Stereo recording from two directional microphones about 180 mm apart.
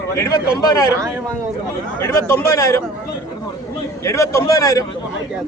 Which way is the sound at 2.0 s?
15° left (ahead or behind).